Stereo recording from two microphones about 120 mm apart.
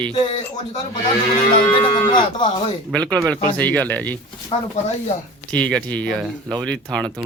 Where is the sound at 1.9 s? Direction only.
40° left (ahead or behind).